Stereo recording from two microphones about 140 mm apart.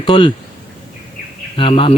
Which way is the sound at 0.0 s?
35° left (ahead or behind).